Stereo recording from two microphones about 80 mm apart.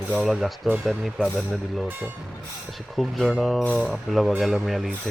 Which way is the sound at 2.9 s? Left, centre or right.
Centre.